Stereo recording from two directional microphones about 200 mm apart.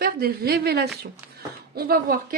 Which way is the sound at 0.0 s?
50° right (ahead or behind).